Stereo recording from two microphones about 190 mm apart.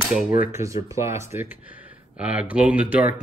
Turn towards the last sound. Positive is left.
turn(degrees=-5)  # may be behind; listen again after turning